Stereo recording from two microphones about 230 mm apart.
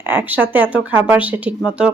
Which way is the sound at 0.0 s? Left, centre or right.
Centre.